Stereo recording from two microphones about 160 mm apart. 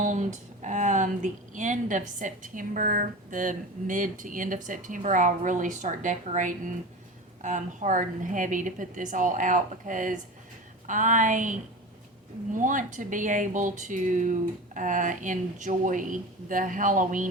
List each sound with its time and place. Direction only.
0.0 s a woman's voice: 50° right (ahead or behind)